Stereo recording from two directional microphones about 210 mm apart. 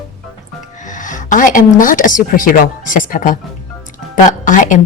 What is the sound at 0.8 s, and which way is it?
A woman's voice, 35° left (ahead or behind).